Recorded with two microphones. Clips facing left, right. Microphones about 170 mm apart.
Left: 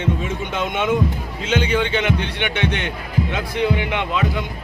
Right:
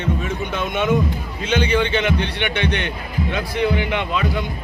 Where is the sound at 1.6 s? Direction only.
10° left (ahead or behind).